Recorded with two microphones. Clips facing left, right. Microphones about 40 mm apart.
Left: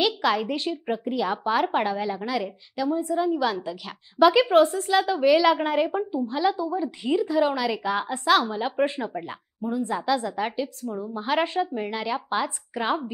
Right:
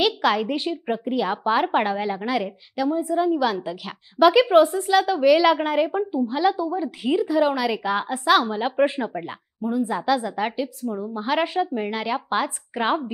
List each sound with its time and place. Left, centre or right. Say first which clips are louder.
0.0 s speech: right 2 dB; centre
2.7 s a woman's voice: right 2 dB; centre